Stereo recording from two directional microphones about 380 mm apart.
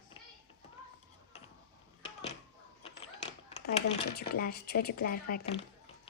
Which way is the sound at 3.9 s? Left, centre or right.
Left.